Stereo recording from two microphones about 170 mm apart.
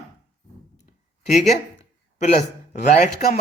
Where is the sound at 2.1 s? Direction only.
40° left (ahead or behind).